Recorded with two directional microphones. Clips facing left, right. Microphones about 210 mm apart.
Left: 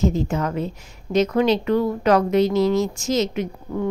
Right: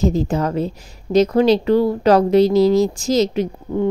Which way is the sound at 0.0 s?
35° right (ahead or behind).